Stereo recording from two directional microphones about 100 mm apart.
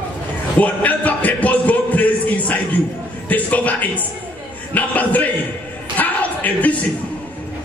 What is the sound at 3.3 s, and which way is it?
A man's voice, 15° left (ahead or behind).